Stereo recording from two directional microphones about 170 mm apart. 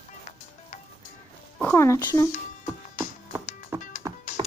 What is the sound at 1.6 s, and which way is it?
Speech, 10° left (ahead or behind).